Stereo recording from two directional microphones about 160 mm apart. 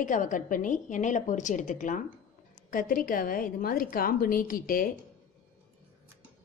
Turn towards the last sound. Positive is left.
turn(degrees=65)  # may be behind; listen again after turning